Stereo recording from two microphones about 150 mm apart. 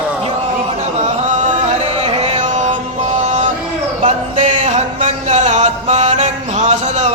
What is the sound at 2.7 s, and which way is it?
Mantra, 35° right (ahead or behind).